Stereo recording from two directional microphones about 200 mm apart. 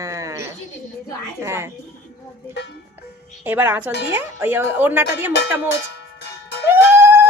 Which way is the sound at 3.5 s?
10° right (ahead or behind).